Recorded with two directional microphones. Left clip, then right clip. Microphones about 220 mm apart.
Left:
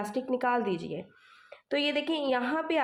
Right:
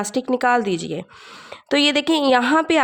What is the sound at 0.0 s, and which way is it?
A woman's voice, 50° right (ahead or behind).